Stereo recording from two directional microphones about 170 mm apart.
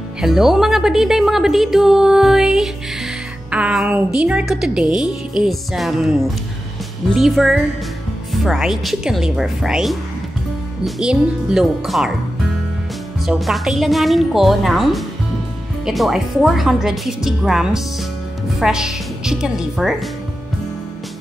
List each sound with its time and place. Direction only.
0.2 s a woman's voice: centre (ahead or behind)
13.2 s a woman's voice: centre (ahead or behind)